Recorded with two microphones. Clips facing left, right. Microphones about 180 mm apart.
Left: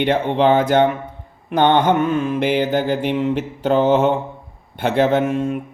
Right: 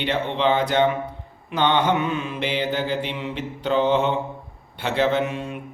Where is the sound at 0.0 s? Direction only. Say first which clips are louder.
Left 6 dB; 50° left (ahead or behind).